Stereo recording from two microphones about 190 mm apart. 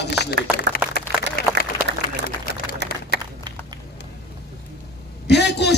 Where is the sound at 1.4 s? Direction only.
50° left (ahead or behind).